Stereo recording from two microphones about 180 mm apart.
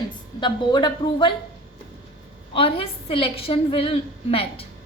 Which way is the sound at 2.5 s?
30° left (ahead or behind).